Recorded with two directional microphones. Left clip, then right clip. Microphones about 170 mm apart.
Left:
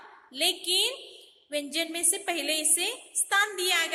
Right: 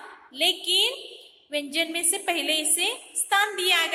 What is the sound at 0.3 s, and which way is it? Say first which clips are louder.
A woman's voice: right 4 dB; 15° left (ahead or behind).